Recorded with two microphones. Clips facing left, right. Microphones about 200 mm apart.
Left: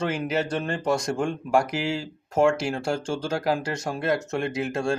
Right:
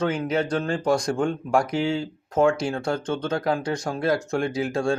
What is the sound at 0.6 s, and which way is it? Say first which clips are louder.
Speech: right 3 dB; 5° left (ahead or behind).